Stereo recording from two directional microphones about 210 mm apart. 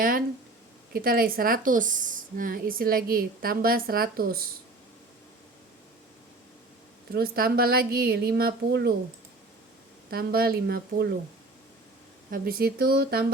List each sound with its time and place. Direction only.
0.9 s a woman's voice: 45° right (ahead or behind)
7.1 s a woman's voice: 45° right (ahead or behind)
10.1 s a woman's voice: 45° right (ahead or behind)
12.3 s a woman's voice: 45° right (ahead or behind)